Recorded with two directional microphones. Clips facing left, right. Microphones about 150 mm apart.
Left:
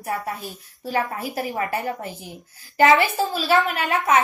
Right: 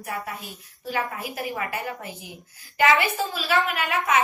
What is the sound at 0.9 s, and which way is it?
A woman's voice, 35° left (ahead or behind).